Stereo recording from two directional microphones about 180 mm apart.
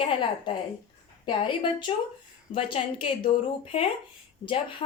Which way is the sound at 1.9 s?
30° left (ahead or behind).